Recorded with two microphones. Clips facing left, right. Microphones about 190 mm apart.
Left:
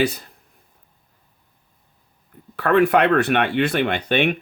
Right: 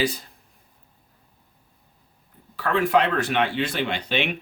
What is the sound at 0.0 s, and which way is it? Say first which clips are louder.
Speech: left 4 dB; 60° left (ahead or behind).